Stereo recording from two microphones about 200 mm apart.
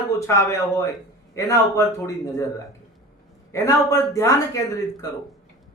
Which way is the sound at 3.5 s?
15° left (ahead or behind).